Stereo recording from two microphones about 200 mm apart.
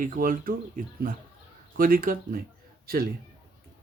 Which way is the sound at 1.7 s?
45° right (ahead or behind).